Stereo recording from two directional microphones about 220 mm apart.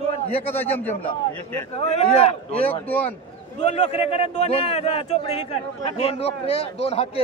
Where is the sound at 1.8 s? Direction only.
25° left (ahead or behind).